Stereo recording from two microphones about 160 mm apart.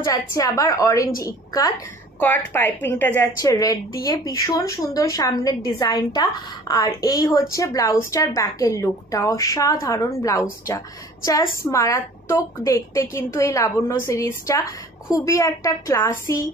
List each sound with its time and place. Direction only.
0.0 s a woman's voice: 20° left (ahead or behind)
2.1 s a woman's voice: 10° left (ahead or behind)